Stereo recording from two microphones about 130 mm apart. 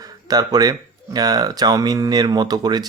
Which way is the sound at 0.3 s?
30° right (ahead or behind).